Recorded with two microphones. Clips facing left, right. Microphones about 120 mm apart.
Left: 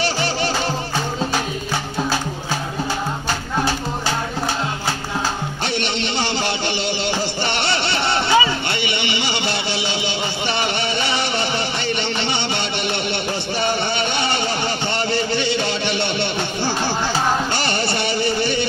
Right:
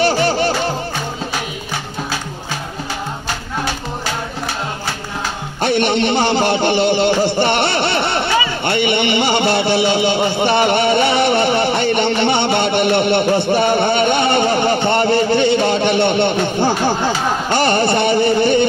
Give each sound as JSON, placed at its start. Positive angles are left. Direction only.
{"t": 0.0, "sound": "music", "side_deg": -50}
{"t": 5.6, "sound": "music", "side_deg": -50}
{"t": 8.6, "sound": "a sound", "side_deg": -50}